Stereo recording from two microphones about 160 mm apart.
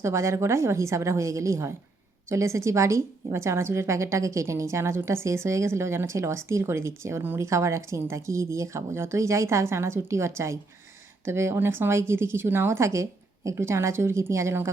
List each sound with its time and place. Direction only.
0.0 s a woman's voice: 15° right (ahead or behind)